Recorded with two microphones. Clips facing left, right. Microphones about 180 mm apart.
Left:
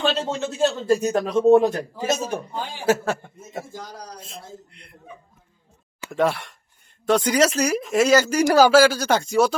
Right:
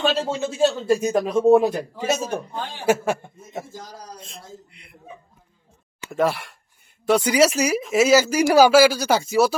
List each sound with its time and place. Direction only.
0.0 s speech: 10° right (ahead or behind)
2.2 s a man's voice: 10° left (ahead or behind)
2.8 s speech: 15° right (ahead or behind)
4.2 s a man's voice: centre (ahead or behind)
6.1 s a man's voice: centre (ahead or behind)